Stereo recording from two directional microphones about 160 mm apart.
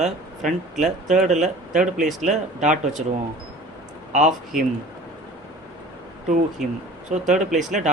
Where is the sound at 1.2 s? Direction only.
50° right (ahead or behind).